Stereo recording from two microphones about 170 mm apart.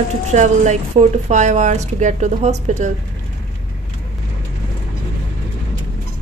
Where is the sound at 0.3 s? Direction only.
45° right (ahead or behind).